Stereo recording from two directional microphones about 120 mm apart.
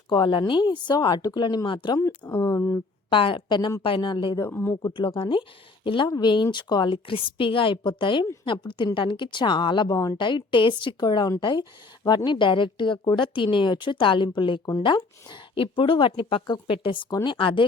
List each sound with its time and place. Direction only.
0.1 s a woman's voice: 40° left (ahead or behind)
2.5 s speech: 20° left (ahead or behind)
3.1 s speech: 45° left (ahead or behind)
4.4 s speech: 20° left (ahead or behind)
4.8 s a woman's voice: 45° left (ahead or behind)